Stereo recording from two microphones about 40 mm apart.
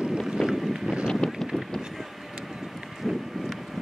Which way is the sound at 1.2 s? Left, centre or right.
Centre.